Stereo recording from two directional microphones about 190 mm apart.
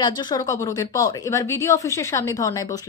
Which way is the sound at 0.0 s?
20° left (ahead or behind).